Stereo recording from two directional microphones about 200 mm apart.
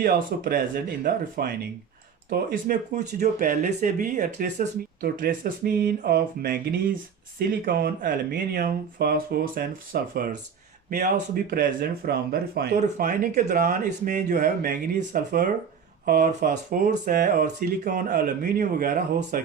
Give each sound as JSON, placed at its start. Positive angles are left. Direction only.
{"t": 0.0, "sound": "speech", "side_deg": -45}